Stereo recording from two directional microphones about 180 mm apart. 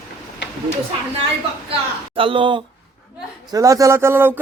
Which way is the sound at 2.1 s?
30° right (ahead or behind).